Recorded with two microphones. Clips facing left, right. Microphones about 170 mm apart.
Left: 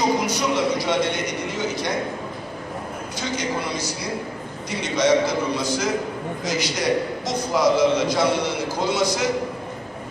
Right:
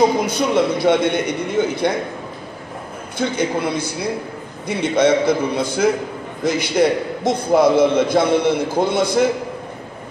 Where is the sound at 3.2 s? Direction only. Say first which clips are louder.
Right 7 dB; 55° right (ahead or behind).